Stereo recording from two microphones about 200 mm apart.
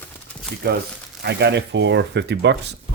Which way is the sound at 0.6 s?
50° right (ahead or behind).